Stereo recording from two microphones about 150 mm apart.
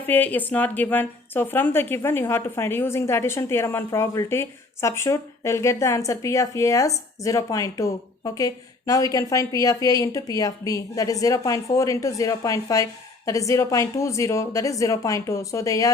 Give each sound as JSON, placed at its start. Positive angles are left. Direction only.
{"t": 0.1, "sound": "a woman's voice", "side_deg": 10}